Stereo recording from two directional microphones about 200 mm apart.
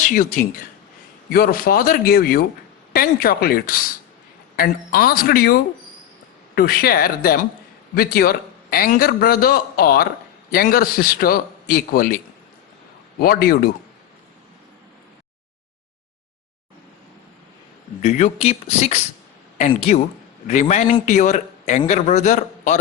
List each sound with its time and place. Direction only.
0.0 s a man's voice: 40° left (ahead or behind)
6.6 s a man's voice: 50° left (ahead or behind)
18.0 s a man's voice: 35° left (ahead or behind)